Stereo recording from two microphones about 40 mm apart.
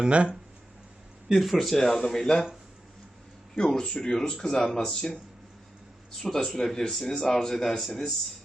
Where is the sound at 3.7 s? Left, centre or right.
Centre.